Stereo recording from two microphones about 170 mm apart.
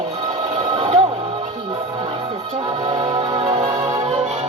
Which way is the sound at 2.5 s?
30° right (ahead or behind).